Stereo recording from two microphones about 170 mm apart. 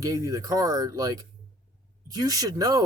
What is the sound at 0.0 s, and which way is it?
Speech, 20° right (ahead or behind).